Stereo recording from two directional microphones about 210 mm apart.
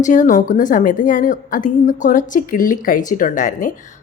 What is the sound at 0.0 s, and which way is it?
A woman's voice, 35° left (ahead or behind).